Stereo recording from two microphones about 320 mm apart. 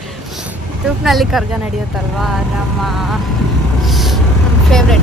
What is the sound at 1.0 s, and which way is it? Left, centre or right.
A woman's voice, centre.